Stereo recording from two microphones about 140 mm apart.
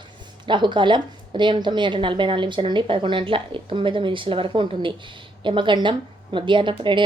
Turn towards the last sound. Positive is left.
turn(degrees=-35)  # may be behind; listen again after turning